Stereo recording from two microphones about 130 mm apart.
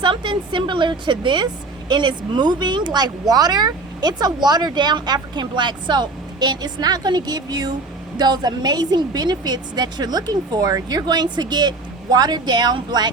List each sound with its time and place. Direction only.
0.0 s speech: 35° right (ahead or behind)